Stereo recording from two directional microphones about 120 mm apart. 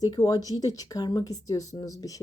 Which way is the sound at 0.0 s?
30° left (ahead or behind).